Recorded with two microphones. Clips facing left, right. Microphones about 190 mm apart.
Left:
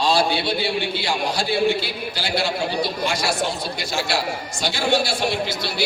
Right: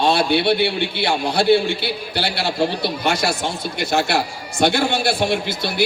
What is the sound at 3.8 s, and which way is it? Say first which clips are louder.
A man's voice: right 6 dB; 60° right (ahead or behind).